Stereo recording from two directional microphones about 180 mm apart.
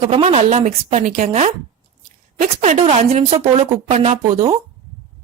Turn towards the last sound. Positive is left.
turn(degrees=-35)  # may be behind; listen again after turning